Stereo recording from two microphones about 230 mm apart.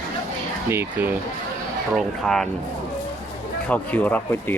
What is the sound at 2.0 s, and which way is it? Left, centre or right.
Speech, centre.